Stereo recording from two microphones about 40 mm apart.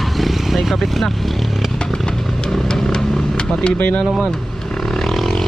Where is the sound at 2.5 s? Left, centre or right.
Centre.